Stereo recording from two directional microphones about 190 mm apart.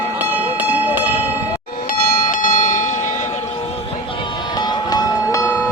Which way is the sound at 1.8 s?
45° left (ahead or behind).